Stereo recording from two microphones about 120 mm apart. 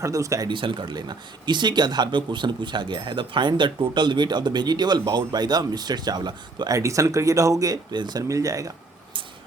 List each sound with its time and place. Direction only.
0.0 s speech: 25° right (ahead or behind)
0.5 s speech: 45° right (ahead or behind)